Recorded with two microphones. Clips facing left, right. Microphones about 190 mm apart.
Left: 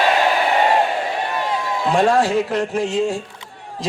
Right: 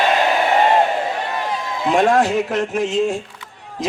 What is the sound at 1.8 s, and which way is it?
A man's voice, 20° right (ahead or behind).